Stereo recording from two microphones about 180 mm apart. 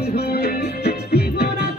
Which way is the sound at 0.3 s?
60° left (ahead or behind).